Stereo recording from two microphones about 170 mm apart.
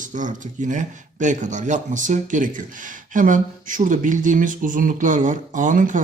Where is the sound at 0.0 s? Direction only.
50° right (ahead or behind).